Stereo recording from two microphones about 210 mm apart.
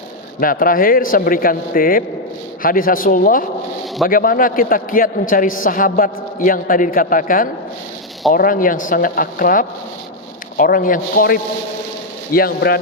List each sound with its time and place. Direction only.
0.3 s a man's voice: 40° left (ahead or behind)